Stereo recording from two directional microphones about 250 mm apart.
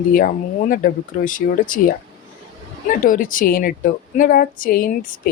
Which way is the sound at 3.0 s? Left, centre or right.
Left.